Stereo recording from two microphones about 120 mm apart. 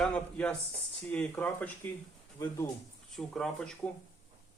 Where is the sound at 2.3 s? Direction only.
30° left (ahead or behind).